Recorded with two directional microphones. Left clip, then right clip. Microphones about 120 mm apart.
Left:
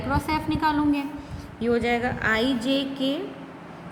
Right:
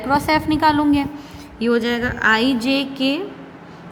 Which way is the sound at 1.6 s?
80° right.